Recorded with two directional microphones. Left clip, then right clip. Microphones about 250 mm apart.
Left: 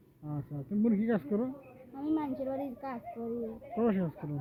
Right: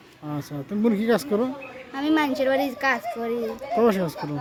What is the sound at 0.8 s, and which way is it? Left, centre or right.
Speech, centre.